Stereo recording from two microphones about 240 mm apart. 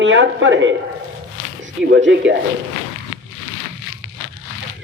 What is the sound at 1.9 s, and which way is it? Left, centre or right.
Speech, right.